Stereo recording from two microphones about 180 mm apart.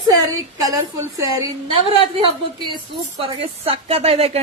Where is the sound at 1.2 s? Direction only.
20° right (ahead or behind).